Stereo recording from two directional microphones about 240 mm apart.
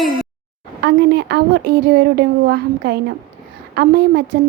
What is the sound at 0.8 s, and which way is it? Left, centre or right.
A woman's voice, right.